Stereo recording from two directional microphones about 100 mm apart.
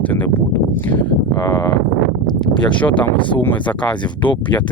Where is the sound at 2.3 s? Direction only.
45° left (ahead or behind).